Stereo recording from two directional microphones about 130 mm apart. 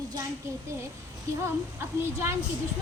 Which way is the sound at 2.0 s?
20° right (ahead or behind).